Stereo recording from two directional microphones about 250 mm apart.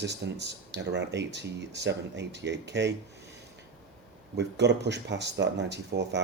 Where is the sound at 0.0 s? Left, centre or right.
Right.